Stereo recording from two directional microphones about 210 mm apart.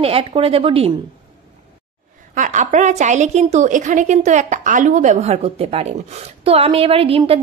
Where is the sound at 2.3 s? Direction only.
35° right (ahead or behind).